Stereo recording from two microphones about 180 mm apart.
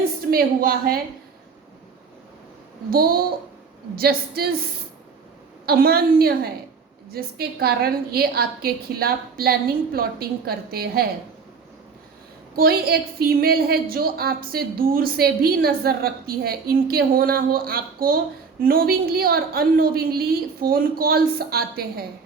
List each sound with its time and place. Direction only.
0.3 s a woman's voice: 55° right (ahead or behind)
2.9 s a woman's voice: 55° right (ahead or behind)
5.6 s a woman's voice: 55° right (ahead or behind)
12.5 s a woman's voice: 60° right (ahead or behind)